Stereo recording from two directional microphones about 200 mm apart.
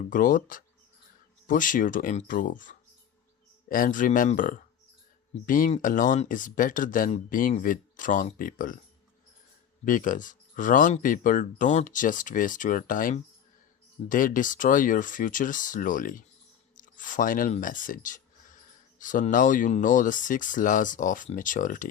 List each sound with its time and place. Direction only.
0.1 s speech: 40° left (ahead or behind)
9.8 s speech: 40° left (ahead or behind)